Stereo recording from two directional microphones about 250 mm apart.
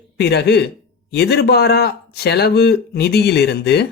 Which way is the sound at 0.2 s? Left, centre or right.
Left.